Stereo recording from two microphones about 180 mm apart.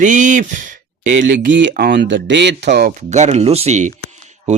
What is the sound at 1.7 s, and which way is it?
Speech, 65° right (ahead or behind).